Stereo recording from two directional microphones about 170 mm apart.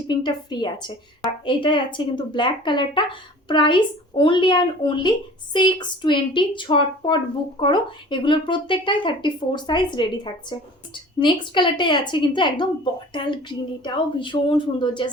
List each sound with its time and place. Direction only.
0.1 s speech: 25° left (ahead or behind)